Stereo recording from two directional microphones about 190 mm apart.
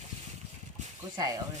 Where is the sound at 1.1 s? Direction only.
20° right (ahead or behind).